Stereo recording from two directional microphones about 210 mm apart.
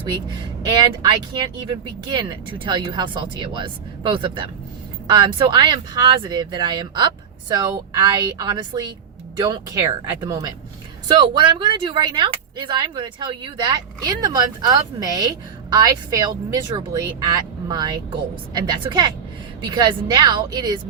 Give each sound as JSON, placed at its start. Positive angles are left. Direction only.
{"t": 0.6, "sound": "speech", "side_deg": -20}